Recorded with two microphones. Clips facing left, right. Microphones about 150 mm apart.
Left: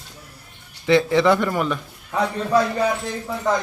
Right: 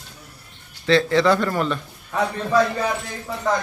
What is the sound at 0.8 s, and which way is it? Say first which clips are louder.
Speech: left 1 dB; 20° left (ahead or behind).